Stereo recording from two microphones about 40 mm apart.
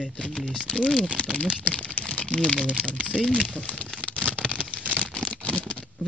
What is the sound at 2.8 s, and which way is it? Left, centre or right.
Speech, left.